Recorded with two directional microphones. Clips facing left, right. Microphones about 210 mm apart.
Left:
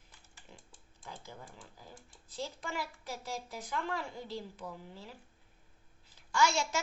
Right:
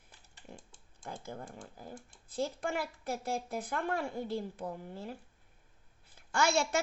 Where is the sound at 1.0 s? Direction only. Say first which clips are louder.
Right 6 dB; 50° right (ahead or behind).